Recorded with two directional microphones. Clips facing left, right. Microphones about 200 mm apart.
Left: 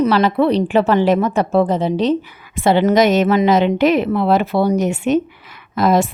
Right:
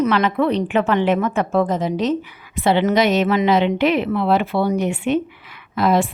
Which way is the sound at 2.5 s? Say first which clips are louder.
Left 3 dB; 45° left (ahead or behind).